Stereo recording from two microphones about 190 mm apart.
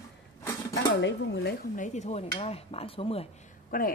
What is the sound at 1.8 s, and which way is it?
Speech, 40° left (ahead or behind).